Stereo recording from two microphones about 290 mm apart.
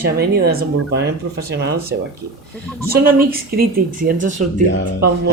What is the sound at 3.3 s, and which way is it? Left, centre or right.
Speech, right.